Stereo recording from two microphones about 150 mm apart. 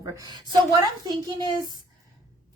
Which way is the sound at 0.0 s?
25° right (ahead or behind).